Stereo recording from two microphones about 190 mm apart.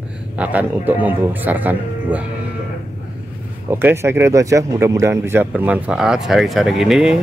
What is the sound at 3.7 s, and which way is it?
Speech, 10° right (ahead or behind).